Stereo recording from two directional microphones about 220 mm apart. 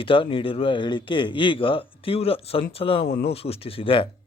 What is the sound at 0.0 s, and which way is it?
Speech, 25° left (ahead or behind).